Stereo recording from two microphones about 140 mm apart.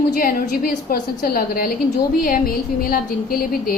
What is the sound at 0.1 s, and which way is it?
A woman's voice, 85° left.